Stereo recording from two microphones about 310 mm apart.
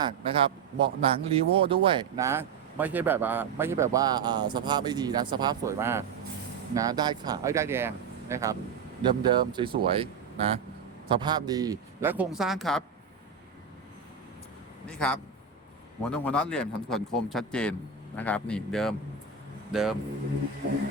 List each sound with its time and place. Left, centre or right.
0.0 s speech: centre
14.8 s speech: centre